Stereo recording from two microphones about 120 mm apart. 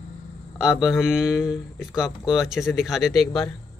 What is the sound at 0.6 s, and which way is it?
A man's voice, 5° right (ahead or behind).